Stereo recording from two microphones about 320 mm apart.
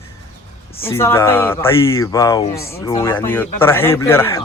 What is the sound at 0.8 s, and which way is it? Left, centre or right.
Speech, centre.